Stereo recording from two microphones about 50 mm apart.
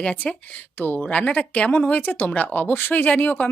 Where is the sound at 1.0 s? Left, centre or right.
Left.